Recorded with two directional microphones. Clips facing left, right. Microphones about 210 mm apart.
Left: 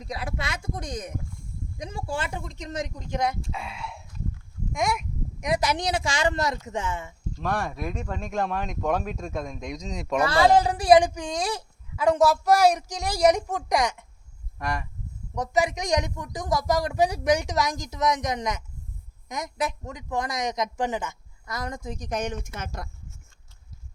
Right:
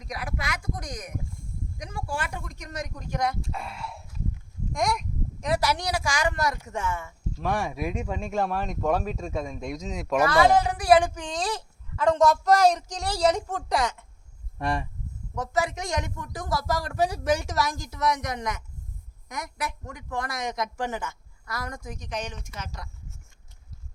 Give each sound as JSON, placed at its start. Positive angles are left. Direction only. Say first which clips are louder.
{"t": 0.0, "sound": "speech", "louder": "left 2 dB", "side_deg": 25}
{"t": 3.4, "sound": "speech", "louder": "even", "side_deg": 0}
{"t": 5.4, "sound": "speech", "louder": "left 1 dB", "side_deg": 15}
{"t": 7.3, "sound": "speech", "louder": "right 1 dB", "side_deg": -10}
{"t": 10.2, "sound": "speech", "louder": "left 1 dB", "side_deg": 30}
{"t": 10.8, "sound": "speech", "louder": "left 2 dB", "side_deg": 15}
{"t": 14.6, "sound": "speech", "louder": "right 3 dB", "side_deg": -30}
{"t": 15.4, "sound": "speech", "louder": "left 3 dB", "side_deg": 15}
{"t": 21.9, "sound": "speech", "louder": "left 7 dB", "side_deg": 40}